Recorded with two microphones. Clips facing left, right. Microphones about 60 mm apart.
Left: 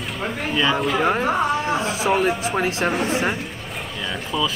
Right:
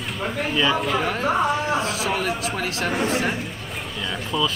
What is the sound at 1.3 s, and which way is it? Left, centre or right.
Speech, centre.